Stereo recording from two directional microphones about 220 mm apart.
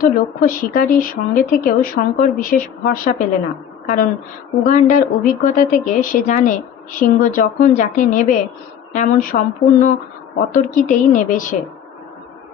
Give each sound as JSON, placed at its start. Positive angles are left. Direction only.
{"t": 0.0, "sound": "speech", "side_deg": 40}